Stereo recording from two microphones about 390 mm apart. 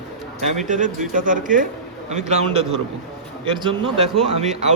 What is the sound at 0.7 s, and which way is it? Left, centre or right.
A man's voice, centre.